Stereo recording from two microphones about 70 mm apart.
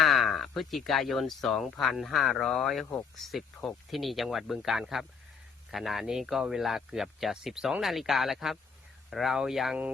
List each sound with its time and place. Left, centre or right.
0.0 s speech: centre